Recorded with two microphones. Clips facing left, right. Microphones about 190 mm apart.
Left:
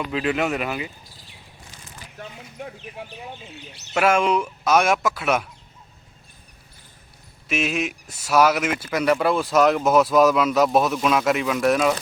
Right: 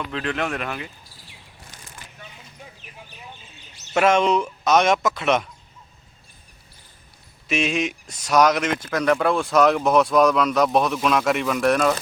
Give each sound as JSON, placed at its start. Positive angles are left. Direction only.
{"t": 0.0, "sound": "speech", "side_deg": 5}
{"t": 2.1, "sound": "a sound", "side_deg": 70}
{"t": 3.5, "sound": "speech", "side_deg": 65}
{"t": 3.9, "sound": "speech", "side_deg": 5}
{"t": 7.4, "sound": "speech", "side_deg": 5}